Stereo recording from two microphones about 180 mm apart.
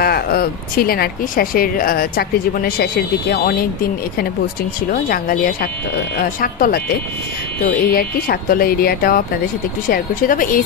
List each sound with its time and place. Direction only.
0.0 s speech: 55° left (ahead or behind)